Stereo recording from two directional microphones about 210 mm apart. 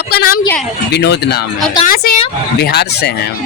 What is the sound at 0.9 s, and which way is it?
Speech, 55° left (ahead or behind).